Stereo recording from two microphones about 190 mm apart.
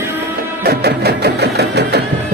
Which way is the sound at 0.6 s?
60° right (ahead or behind).